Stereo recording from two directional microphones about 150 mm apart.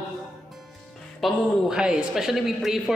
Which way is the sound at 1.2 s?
Centre (ahead or behind).